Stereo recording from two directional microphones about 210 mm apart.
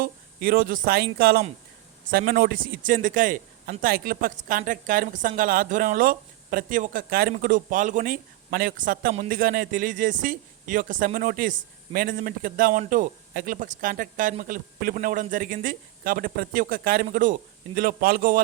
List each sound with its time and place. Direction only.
0.0 s a man's voice: 45° right (ahead or behind)